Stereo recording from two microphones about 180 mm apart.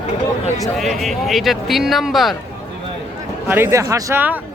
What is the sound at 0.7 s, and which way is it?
Speech, centre (ahead or behind).